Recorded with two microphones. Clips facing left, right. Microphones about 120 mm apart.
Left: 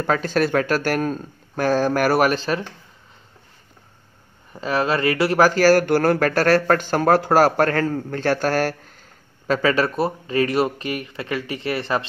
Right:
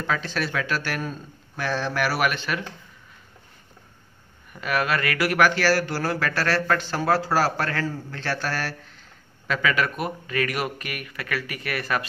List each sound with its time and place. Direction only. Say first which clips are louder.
0.0 s speech: left 7 dB; 45° left (ahead or behind)
4.5 s speech: left 4 dB; 30° left (ahead or behind); by 9.0 s 45° left (ahead or behind)
9.5 s speech: left 5 dB; 35° left (ahead or behind)